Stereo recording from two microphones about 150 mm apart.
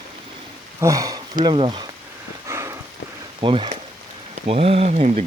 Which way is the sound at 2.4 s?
20° right (ahead or behind).